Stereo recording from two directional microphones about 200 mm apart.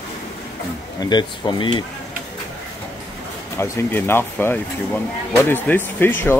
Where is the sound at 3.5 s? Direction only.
15° left (ahead or behind).